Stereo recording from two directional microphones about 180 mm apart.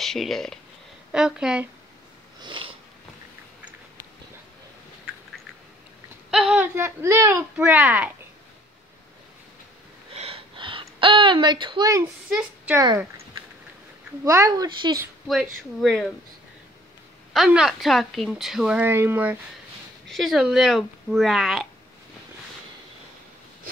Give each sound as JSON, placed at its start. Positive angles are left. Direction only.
{"t": 0.0, "sound": "a woman's voice", "side_deg": 0}
{"t": 2.4, "sound": "sniff", "side_deg": -25}
{"t": 6.3, "sound": "speech", "side_deg": -5}
{"t": 10.1, "sound": "a sound", "side_deg": -35}
{"t": 12.4, "sound": "a woman's voice", "side_deg": -10}
{"t": 14.2, "sound": "a woman's voice", "side_deg": -20}
{"t": 15.2, "sound": "a woman's voice", "side_deg": 0}
{"t": 17.3, "sound": "a woman's voice", "side_deg": 0}
{"t": 20.1, "sound": "a woman's voice", "side_deg": 0}